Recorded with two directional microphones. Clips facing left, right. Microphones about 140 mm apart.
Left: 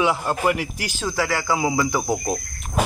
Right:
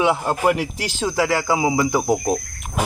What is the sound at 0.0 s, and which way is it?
A man's voice, 20° right (ahead or behind).